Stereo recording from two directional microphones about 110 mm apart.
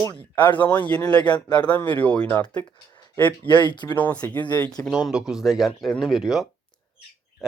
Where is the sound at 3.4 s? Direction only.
45° left (ahead or behind).